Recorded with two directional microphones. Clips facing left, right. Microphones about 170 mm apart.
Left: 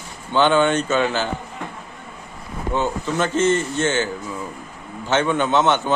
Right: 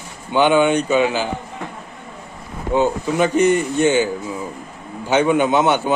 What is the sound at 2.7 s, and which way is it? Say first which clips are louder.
A man's voice: right 5 dB; 15° right (ahead or behind).